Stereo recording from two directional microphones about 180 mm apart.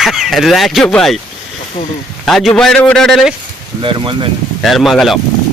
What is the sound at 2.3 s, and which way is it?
Speech, centre (ahead or behind).